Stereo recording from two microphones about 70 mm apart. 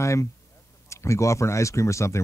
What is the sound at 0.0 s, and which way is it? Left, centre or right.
Speech, left.